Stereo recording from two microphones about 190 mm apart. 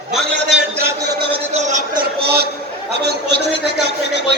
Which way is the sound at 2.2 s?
60° right (ahead or behind).